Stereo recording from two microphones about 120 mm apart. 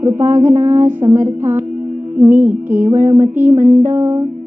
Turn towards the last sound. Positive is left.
turn(degrees=-15)  # may be behind; listen again after turning